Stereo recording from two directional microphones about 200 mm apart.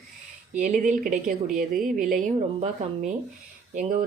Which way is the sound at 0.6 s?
40° right (ahead or behind).